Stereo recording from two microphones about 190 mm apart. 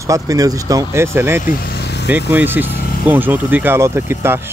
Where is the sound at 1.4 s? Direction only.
55° left (ahead or behind).